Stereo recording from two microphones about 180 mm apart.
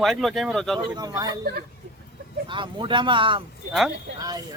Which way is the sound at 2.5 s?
25° right (ahead or behind).